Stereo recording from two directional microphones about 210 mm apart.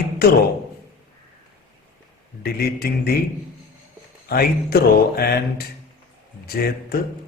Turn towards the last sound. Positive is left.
turn(degrees=45)  # may be behind; listen again after turning